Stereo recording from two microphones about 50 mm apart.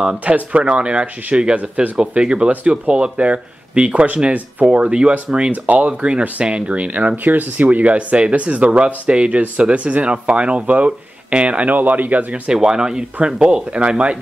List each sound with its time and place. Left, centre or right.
0.0 s speech: right
4.6 s speech: centre
12.4 s speech: centre